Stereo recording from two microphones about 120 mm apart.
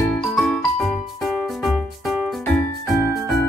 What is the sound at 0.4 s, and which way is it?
Music, centre (ahead or behind).